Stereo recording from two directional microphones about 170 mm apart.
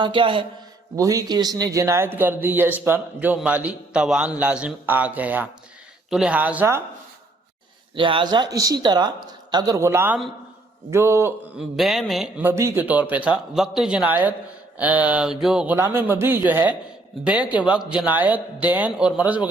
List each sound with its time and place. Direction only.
0.0 s speech: 30° right (ahead or behind)
0.9 s speech: 20° right (ahead or behind)
7.9 s speech: 30° right (ahead or behind)
11.5 s mantra: centre (ahead or behind)
12.5 s speech: 15° right (ahead or behind)